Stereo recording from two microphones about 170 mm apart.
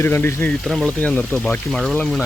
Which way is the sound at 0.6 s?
Centre (ahead or behind).